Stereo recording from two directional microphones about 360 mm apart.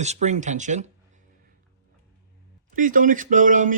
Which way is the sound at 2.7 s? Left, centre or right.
Right.